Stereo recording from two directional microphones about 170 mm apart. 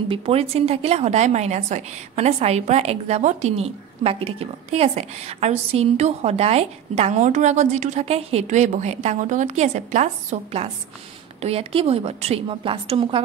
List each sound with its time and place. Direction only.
0.1 s a woman's voice: 35° right (ahead or behind)